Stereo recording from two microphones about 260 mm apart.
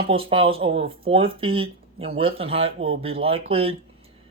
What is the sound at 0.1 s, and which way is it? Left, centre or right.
Speech, right.